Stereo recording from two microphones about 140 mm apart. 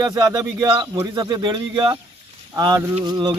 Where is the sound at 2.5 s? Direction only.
25° right (ahead or behind).